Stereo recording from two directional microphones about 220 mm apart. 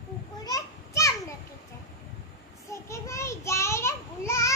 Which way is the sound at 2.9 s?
15° left (ahead or behind).